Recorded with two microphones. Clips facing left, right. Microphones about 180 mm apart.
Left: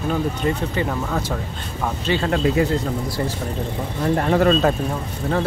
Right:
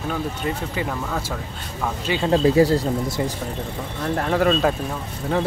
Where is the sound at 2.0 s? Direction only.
15° right (ahead or behind).